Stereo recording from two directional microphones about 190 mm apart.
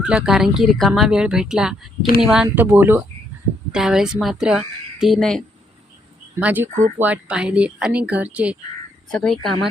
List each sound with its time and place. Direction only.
0.0 s speech: 5° right (ahead or behind)
6.4 s speech: 10° right (ahead or behind)
6.7 s speech: 40° right (ahead or behind)
7.0 s speech: 5° right (ahead or behind)